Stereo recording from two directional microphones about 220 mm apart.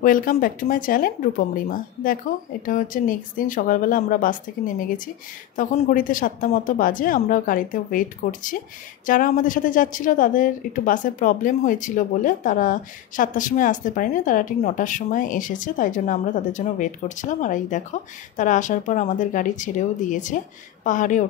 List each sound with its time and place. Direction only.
0.0 s a woman's voice: 40° left (ahead or behind)